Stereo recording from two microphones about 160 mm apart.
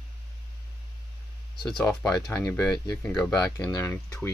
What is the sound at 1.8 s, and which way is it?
Speech, 5° left (ahead or behind).